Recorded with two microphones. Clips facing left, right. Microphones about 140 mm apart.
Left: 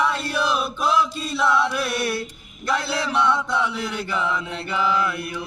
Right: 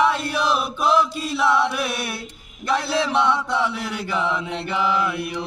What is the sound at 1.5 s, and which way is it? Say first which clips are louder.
Mantra: right 1 dB; 10° right (ahead or behind).